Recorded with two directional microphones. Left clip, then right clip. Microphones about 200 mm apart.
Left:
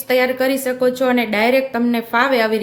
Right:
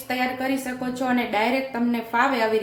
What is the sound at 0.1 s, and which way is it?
A woman's voice, 50° left (ahead or behind).